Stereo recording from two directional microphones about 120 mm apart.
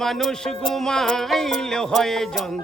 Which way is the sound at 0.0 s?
Centre (ahead or behind).